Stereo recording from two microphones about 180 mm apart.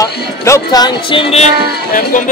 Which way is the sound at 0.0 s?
20° left (ahead or behind).